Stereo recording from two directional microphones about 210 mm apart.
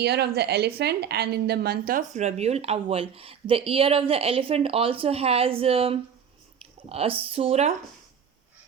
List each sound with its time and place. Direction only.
0.0 s a woman's voice: 50° right (ahead or behind); by 7.8 s 30° right (ahead or behind)